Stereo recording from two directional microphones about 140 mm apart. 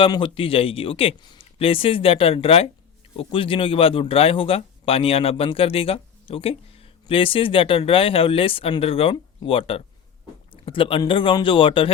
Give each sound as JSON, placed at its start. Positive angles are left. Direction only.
{"t": 0.0, "sound": "speech", "side_deg": 40}